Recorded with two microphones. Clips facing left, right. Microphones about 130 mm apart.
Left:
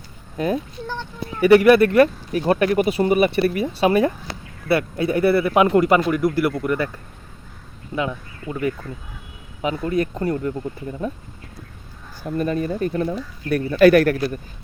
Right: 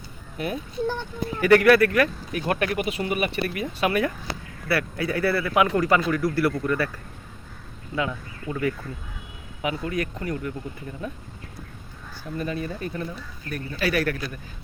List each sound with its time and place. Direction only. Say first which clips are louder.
0.3 s speech: left 7 dB; 35° left (ahead or behind)
1.4 s speech: left 4 dB; 15° left (ahead or behind)
9.6 s speech: left 5 dB; 35° left (ahead or behind)
12.2 s speech: left 7 dB; 50° left (ahead or behind)
13.1 s speech: left 11 dB; 65° left (ahead or behind); by 14.3 s 50° left (ahead or behind)